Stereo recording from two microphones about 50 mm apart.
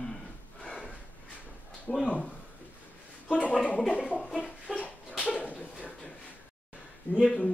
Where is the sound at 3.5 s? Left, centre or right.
Left.